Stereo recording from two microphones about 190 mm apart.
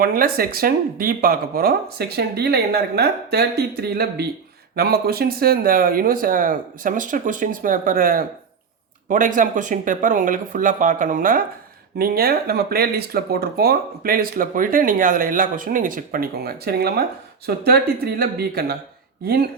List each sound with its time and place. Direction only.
0.0 s speech: 50° right (ahead or behind)